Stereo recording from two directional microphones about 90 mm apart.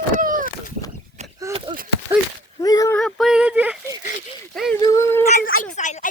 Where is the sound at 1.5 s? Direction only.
90° right.